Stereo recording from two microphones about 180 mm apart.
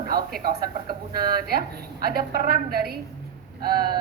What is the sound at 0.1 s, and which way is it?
A woman's voice, 55° right (ahead or behind).